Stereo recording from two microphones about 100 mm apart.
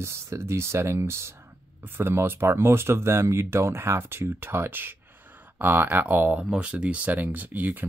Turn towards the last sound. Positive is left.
turn(degrees=-20)  # may be behind; listen again after turning